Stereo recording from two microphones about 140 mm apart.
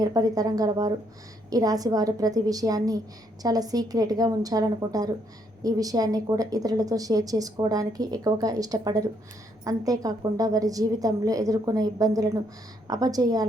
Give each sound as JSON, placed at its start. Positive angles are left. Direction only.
{"t": 0.0, "sound": "speech", "side_deg": -25}